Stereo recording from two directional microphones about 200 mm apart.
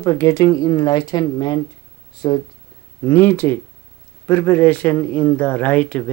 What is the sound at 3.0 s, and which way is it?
Speech, 10° left (ahead or behind).